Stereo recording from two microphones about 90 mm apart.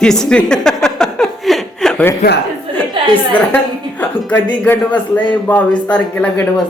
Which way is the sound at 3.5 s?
20° left (ahead or behind).